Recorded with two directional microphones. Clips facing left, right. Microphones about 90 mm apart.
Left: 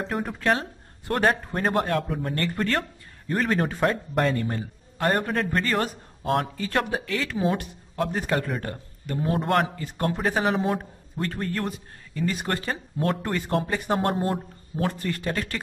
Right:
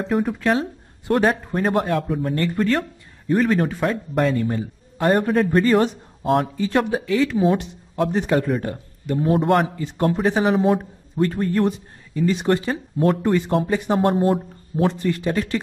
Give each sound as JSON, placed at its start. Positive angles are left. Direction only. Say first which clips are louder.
{"t": 0.0, "sound": "speech", "louder": "right 6 dB", "side_deg": 0}
{"t": 6.5, "sound": "speech", "louder": "right 6 dB", "side_deg": -20}
{"t": 6.8, "sound": "speech", "louder": "right 7 dB", "side_deg": -5}
{"t": 7.5, "sound": "a sound", "louder": "right 6 dB", "side_deg": -20}
{"t": 8.3, "sound": "speech", "louder": "right 6 dB", "side_deg": -5}
{"t": 11.2, "sound": "speech", "louder": "right 8 dB", "side_deg": -10}
{"t": 12.6, "sound": "speech", "louder": "right 7 dB", "side_deg": 0}
{"t": 15.0, "sound": "speech", "louder": "right 6 dB", "side_deg": -15}